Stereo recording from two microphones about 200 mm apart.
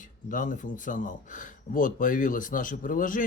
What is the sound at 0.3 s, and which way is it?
Speech, 40° left (ahead or behind).